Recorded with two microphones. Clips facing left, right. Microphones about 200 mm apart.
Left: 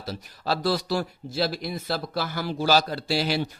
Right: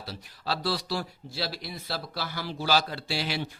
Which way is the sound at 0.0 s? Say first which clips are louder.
Left 5 dB; 45° left (ahead or behind).